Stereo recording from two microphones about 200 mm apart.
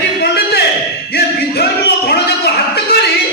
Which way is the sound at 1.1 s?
55° left (ahead or behind).